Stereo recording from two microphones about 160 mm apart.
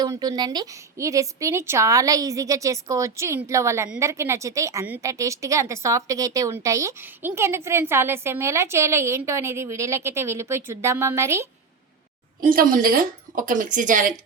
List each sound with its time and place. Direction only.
0.0 s a woman's voice: 25° right (ahead or behind)
12.4 s a woman's voice: 60° right (ahead or behind)